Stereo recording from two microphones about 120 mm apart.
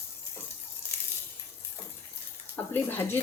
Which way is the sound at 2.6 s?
20° left (ahead or behind).